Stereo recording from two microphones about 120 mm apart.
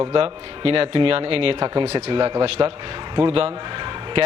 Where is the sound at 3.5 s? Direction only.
45° right (ahead or behind).